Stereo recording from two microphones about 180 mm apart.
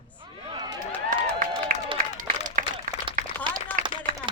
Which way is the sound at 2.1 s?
50° right (ahead or behind).